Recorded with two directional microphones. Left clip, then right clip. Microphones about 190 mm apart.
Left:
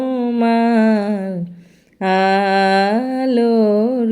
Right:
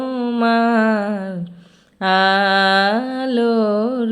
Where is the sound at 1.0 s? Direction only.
10° left (ahead or behind).